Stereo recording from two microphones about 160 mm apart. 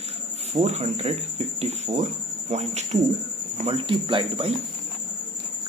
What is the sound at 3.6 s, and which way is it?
Speech, 35° right (ahead or behind).